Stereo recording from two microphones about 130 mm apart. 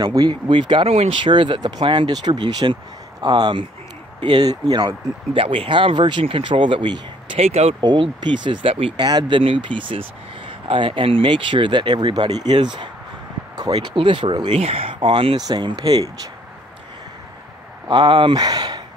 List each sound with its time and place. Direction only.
0.0 s speech: 30° right (ahead or behind); by 1.1 s 50° right (ahead or behind)
1.2 s speech: 40° right (ahead or behind)
5.3 s speech: 45° right (ahead or behind)
7.3 s speech: 55° right (ahead or behind)
7.8 s speech: 35° right (ahead or behind)
9.0 s speech: 30° right (ahead or behind)
14.5 s speech: 50° right (ahead or behind)
15.3 s speech: 30° right (ahead or behind)
17.8 s speech: 35° right (ahead or behind)